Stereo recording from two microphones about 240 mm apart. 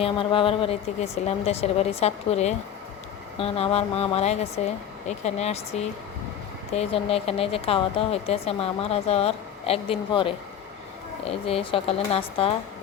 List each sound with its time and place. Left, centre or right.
0.0 s speech: left